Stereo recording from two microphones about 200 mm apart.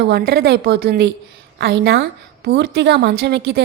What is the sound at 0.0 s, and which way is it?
A woman's voice, 50° right (ahead or behind).